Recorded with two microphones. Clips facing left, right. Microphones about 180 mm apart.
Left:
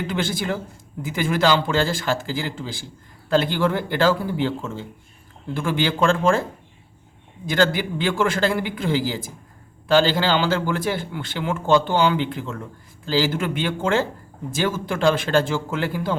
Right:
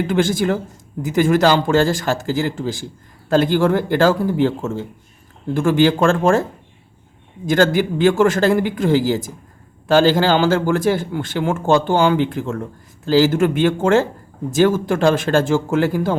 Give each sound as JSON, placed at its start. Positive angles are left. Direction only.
{"t": 0.1, "sound": "speech", "side_deg": -45}
{"t": 7.4, "sound": "speech", "side_deg": -45}